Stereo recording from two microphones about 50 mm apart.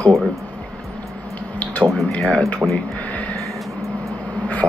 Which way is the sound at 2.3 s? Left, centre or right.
Left.